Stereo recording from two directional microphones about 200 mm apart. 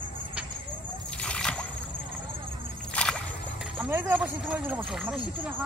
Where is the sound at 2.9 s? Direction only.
5° left (ahead or behind).